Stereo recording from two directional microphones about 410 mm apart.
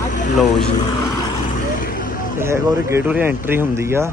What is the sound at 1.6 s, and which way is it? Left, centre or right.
Vehicle, centre.